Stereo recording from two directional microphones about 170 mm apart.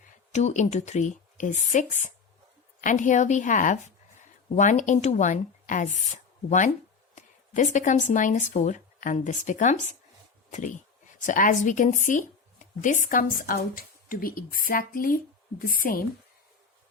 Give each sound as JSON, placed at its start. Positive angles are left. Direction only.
{"t": 0.3, "sound": "a woman's voice", "side_deg": 45}